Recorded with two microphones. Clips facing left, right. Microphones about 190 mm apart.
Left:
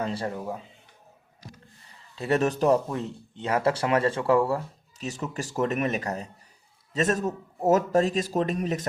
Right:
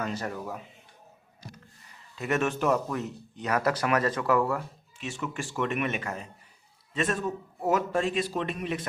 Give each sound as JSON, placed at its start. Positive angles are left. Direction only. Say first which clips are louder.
{"t": 0.0, "sound": "speech", "louder": "left 3 dB", "side_deg": 30}
{"t": 2.1, "sound": "speech", "louder": "left 4 dB", "side_deg": 35}